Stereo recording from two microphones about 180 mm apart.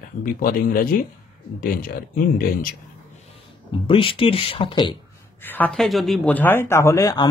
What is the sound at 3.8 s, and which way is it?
Speech, 30° left (ahead or behind).